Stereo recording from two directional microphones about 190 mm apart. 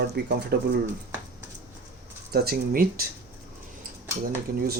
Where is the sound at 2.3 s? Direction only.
55° right (ahead or behind).